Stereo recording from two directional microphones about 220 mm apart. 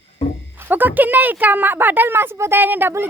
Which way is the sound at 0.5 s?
10° right (ahead or behind).